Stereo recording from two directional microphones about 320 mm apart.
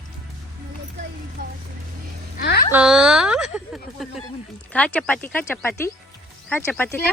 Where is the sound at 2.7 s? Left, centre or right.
Centre.